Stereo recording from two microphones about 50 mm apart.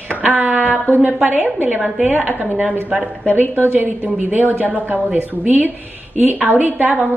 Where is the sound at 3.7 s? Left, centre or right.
Right.